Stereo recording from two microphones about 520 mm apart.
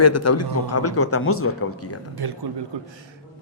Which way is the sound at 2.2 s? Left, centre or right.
Right.